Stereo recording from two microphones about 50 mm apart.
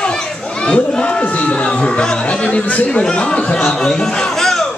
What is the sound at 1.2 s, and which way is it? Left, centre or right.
A man's voice, left.